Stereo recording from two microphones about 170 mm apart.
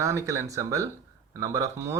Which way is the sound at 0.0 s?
20° right (ahead or behind).